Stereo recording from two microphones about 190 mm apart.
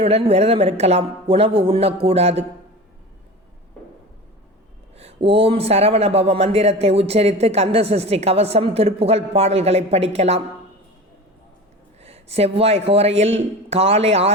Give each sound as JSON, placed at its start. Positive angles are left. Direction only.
{"t": 0.0, "sound": "a man's voice", "side_deg": -30}
{"t": 4.9, "sound": "a man's voice", "side_deg": -30}
{"t": 12.0, "sound": "a man's voice", "side_deg": -35}